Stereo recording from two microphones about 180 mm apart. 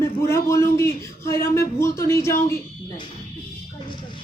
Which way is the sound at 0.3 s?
15° left (ahead or behind).